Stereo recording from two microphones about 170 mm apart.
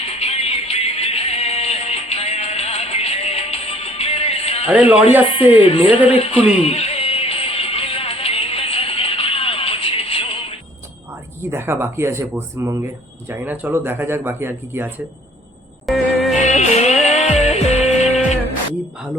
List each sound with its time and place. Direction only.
0.0 s music: 35° left (ahead or behind)
4.6 s speech: 5° right (ahead or behind)
5.2 s speech: 30° left (ahead or behind)
6.1 s music: 35° left (ahead or behind)
11.5 s speech: 15° right (ahead or behind)
15.9 s music: centre (ahead or behind)
16.4 s music: 45° left (ahead or behind)